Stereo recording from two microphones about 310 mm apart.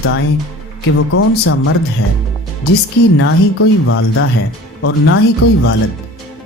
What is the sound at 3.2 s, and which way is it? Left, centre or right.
Speech, left.